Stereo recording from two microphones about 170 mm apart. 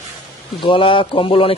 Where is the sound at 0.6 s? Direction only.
30° left (ahead or behind).